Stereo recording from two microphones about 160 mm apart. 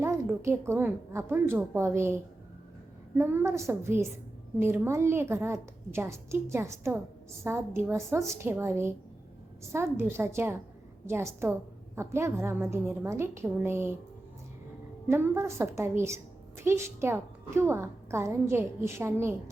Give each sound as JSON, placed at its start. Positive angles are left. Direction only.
{"t": 0.0, "sound": "a woman's voice", "side_deg": -15}
{"t": 3.2, "sound": "a woman's voice", "side_deg": -15}
{"t": 15.0, "sound": "a woman's voice", "side_deg": -15}